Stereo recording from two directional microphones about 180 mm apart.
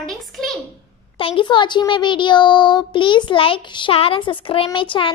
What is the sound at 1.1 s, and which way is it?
Speech, 30° left (ahead or behind).